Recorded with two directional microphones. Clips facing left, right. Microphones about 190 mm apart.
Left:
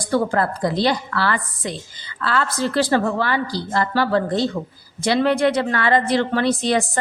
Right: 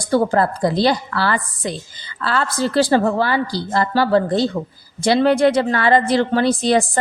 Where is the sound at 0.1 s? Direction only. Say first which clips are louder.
Right 3 dB; 30° right (ahead or behind).